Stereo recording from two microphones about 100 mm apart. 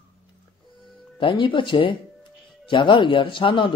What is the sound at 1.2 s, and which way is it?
Speech, 60° left (ahead or behind).